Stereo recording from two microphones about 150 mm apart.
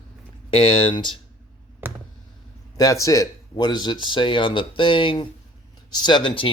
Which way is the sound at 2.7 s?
25° left (ahead or behind).